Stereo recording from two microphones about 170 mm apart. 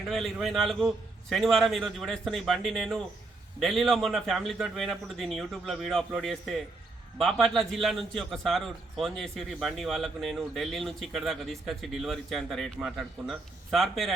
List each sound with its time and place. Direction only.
0.1 s a man's voice: centre (ahead or behind)